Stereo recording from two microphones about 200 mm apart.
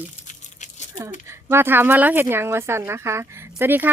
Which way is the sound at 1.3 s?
10° right (ahead or behind).